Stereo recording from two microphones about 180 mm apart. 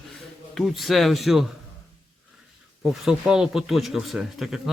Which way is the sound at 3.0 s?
5° right (ahead or behind).